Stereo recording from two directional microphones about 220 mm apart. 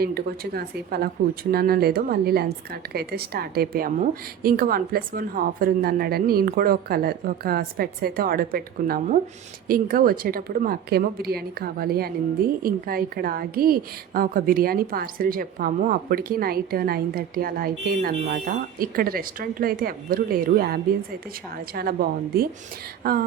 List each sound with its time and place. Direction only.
0.0 s a woman's voice: 45° right (ahead or behind)